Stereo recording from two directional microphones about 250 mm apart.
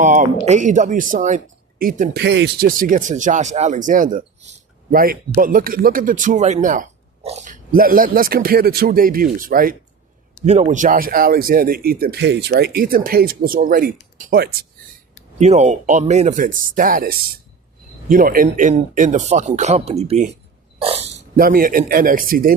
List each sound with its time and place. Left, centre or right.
0.0 s speech: right
15.4 s speech: right
20.8 s dog: right
21.3 s speech: right